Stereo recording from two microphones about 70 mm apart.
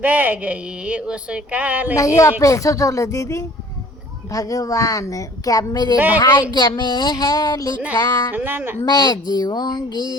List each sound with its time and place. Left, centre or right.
0.0 s speech: right
2.0 s a woman's voice: left
6.1 s a sound: left
8.3 s speech: right
8.8 s speech: left